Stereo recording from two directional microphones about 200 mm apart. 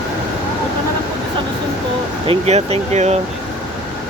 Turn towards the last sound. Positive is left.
turn(degrees=-35)  # may be behind; listen again after turning